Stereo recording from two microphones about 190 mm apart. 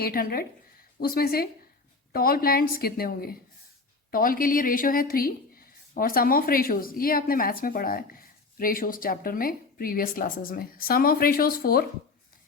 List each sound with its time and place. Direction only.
0.0 s speech: 55° left (ahead or behind)